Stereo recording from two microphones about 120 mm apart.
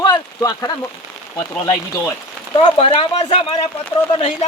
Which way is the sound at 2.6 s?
50° left (ahead or behind).